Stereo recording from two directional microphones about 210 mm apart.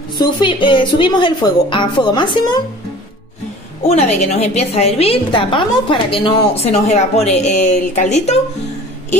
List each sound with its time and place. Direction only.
0.2 s a woman's voice: 20° left (ahead or behind)
3.8 s a woman's voice: 30° left (ahead or behind)